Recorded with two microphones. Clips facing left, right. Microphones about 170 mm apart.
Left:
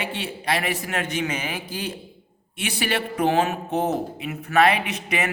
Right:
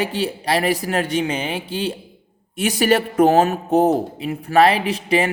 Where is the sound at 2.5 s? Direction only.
40° right (ahead or behind).